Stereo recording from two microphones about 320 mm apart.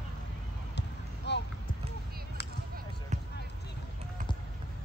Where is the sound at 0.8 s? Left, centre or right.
Left.